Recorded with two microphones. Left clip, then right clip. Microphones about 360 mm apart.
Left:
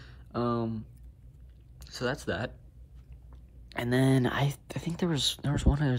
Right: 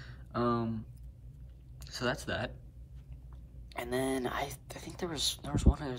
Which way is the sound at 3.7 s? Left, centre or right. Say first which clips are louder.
Left 6 dB; left.